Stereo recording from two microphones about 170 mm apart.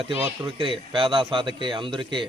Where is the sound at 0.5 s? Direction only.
30° right (ahead or behind).